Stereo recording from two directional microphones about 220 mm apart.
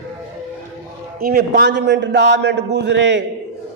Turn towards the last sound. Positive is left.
turn(degrees=-55)  # may be behind; listen again after turning